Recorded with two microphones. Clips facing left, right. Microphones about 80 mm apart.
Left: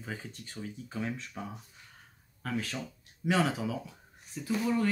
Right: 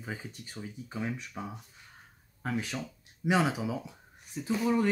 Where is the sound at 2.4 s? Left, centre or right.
Centre.